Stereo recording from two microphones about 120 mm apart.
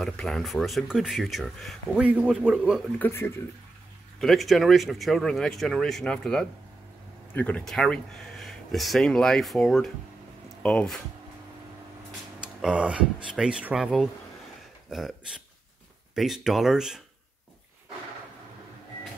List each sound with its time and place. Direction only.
0.0 s speech: 5° left (ahead or behind)
3.0 s speech: 20° left (ahead or behind)
4.2 s speech: centre (ahead or behind)
12.6 s speech: 10° right (ahead or behind)
16.2 s speech: centre (ahead or behind)